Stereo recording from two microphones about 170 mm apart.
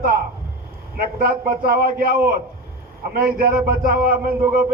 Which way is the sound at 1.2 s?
60° right (ahead or behind).